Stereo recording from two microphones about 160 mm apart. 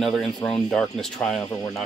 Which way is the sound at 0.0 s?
5° left (ahead or behind).